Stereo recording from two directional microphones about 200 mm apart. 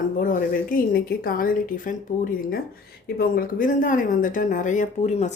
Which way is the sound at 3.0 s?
45° left (ahead or behind).